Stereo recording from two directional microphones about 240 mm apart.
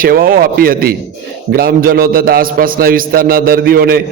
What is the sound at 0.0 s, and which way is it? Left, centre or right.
A man's voice, right.